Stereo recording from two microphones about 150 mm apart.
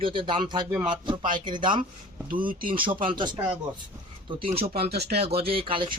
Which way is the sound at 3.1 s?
30° right (ahead or behind).